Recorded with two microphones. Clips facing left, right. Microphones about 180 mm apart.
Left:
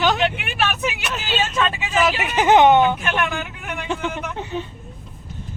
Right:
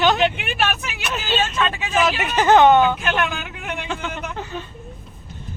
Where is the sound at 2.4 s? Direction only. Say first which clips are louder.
Even; 20° left (ahead or behind).